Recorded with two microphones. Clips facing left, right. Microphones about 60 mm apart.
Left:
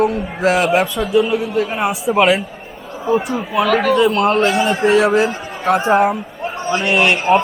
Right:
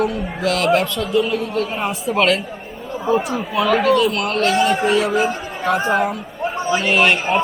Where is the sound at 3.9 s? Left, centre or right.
Left.